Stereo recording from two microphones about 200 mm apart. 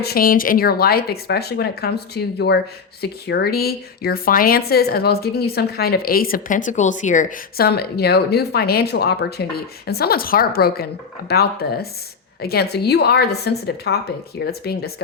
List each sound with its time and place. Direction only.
0.0 s a woman's voice: 50° left (ahead or behind)